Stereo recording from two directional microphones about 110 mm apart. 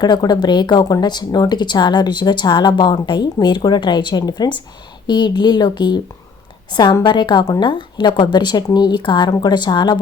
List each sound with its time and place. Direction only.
0.0 s speech: 40° left (ahead or behind)